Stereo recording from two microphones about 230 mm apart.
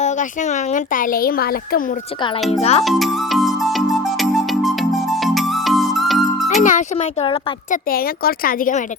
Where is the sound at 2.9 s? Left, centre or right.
Centre.